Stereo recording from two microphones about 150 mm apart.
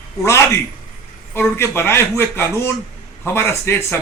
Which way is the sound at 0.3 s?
20° left (ahead or behind).